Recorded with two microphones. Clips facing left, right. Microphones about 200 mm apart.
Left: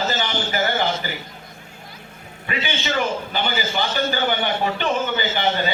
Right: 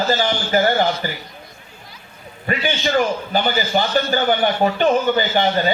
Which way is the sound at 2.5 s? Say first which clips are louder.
Right 6 dB; 50° right (ahead or behind).